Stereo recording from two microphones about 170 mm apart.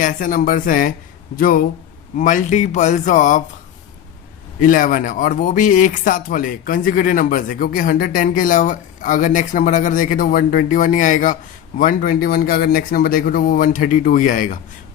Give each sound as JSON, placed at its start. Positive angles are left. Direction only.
{"t": 0.0, "sound": "speech", "side_deg": 50}
{"t": 4.6, "sound": "speech", "side_deg": 55}